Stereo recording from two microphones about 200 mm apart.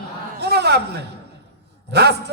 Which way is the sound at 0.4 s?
55° right (ahead or behind).